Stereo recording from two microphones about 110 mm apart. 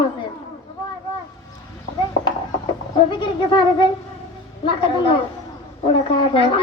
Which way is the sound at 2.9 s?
50° left (ahead or behind).